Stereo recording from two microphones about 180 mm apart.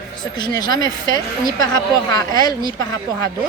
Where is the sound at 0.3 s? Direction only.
25° left (ahead or behind).